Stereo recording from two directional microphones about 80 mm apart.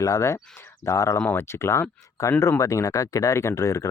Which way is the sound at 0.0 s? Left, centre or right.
Left.